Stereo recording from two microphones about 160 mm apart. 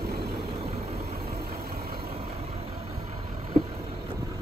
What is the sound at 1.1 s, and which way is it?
Vehicle, 75° right (ahead or behind).